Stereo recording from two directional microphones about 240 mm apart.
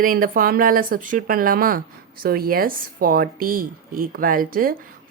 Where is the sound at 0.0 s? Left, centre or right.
Right.